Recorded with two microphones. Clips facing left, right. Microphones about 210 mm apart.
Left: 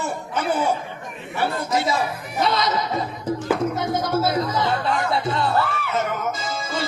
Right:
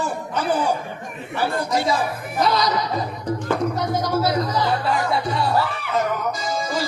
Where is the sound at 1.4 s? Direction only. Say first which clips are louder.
Right 1 dB; 25° left (ahead or behind).